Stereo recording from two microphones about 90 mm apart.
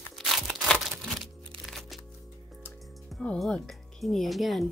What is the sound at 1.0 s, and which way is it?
Music, centre (ahead or behind).